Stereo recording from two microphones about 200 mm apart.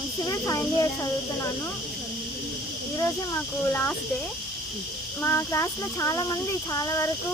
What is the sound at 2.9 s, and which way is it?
Speech, 15° left (ahead or behind).